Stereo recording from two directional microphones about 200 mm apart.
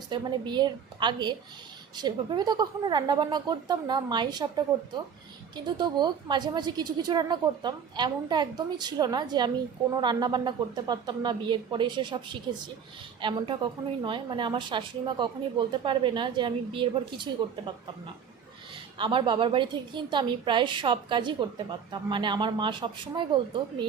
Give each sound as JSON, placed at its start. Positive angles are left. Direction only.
{"t": 0.1, "sound": "a woman's voice", "side_deg": -20}
{"t": 5.6, "sound": "a woman's voice", "side_deg": -20}
{"t": 18.9, "sound": "a woman's voice", "side_deg": -25}